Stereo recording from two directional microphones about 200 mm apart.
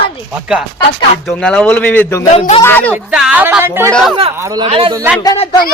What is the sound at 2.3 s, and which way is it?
Speech, 35° left (ahead or behind).